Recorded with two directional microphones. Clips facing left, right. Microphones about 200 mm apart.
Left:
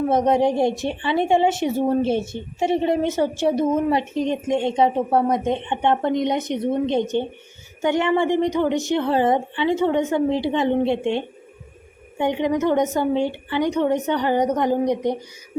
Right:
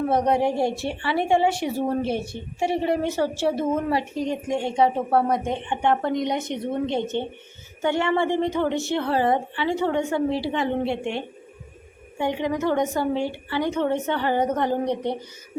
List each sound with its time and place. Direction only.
0.1 s a woman's voice: 20° left (ahead or behind)